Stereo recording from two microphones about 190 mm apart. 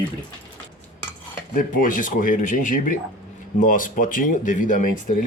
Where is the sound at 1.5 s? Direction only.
45° left (ahead or behind).